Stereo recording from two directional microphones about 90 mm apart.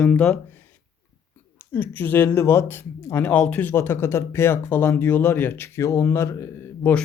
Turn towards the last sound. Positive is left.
turn(degrees=25)  # may be behind; listen again after turning